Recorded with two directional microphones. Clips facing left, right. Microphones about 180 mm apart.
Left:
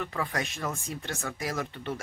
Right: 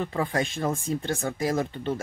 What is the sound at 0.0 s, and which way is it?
Speech, 30° right (ahead or behind).